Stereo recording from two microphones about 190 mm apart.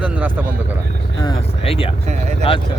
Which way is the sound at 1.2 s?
30° left (ahead or behind).